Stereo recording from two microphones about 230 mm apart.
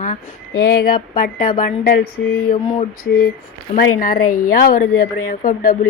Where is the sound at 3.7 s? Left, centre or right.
Left.